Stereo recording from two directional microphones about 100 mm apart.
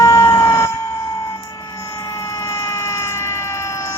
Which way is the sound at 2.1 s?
30° left (ahead or behind).